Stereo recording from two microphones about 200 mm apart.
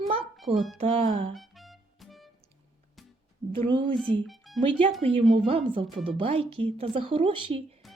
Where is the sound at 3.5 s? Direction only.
25° right (ahead or behind).